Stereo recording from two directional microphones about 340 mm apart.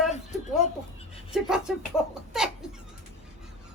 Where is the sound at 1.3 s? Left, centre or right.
Centre.